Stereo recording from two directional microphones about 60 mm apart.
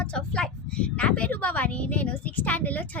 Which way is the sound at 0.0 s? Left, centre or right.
Centre.